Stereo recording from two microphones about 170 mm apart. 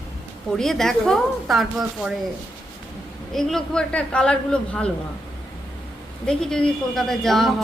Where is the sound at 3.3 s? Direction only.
Centre (ahead or behind).